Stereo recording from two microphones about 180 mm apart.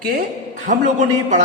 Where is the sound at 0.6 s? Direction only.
40° right (ahead or behind).